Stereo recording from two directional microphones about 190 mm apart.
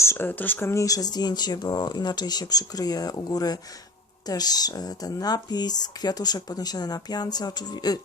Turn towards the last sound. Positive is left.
turn(degrees=20)  # may be behind; listen again after turning